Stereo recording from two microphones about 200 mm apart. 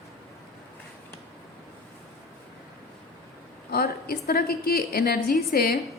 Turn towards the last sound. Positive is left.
turn(degrees=50)  # may be behind; listen again after turning